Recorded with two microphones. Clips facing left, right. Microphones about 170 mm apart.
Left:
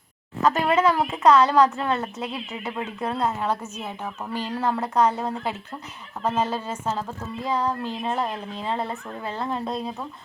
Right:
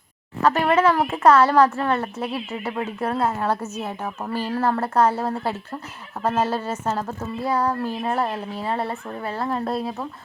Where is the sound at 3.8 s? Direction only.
50° right (ahead or behind).